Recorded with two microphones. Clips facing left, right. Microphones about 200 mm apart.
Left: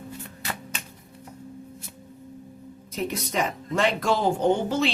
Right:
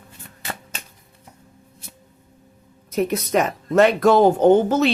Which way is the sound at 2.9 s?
50° right (ahead or behind).